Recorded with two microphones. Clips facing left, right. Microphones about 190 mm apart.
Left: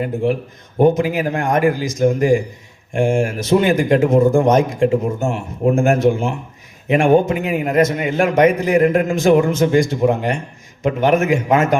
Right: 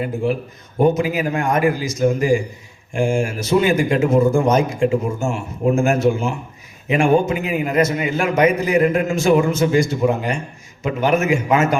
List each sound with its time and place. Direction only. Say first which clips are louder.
1.0 s a man's voice: left 1 dB; 55° left (ahead or behind)